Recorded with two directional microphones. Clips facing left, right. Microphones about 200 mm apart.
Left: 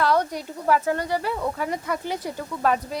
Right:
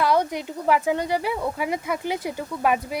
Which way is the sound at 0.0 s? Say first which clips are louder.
Right 1 dB; 10° right (ahead or behind).